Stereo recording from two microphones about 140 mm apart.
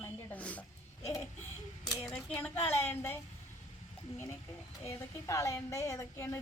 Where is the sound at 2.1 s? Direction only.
5° left (ahead or behind); by 6.3 s 20° left (ahead or behind).